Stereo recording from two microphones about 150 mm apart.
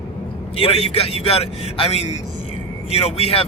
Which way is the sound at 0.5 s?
40° left (ahead or behind).